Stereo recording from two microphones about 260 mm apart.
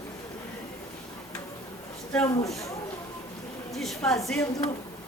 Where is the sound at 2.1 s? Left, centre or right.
Centre.